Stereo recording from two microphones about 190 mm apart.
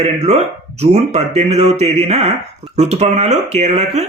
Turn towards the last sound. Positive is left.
turn(degrees=-35)  # may be behind; listen again after turning